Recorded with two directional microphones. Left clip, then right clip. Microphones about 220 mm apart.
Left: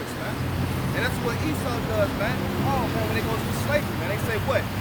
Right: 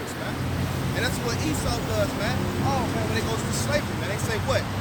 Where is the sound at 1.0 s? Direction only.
5° left (ahead or behind).